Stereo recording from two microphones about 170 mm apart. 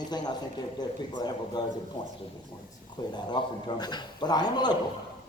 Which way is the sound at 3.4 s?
25° left (ahead or behind).